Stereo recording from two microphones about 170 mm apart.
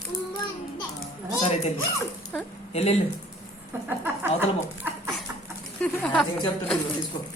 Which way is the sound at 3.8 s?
10° right (ahead or behind).